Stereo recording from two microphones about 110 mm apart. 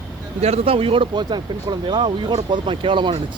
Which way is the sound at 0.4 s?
65° right (ahead or behind).